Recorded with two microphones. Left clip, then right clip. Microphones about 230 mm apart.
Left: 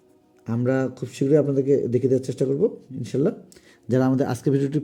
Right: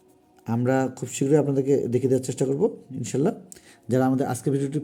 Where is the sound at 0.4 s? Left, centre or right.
Centre.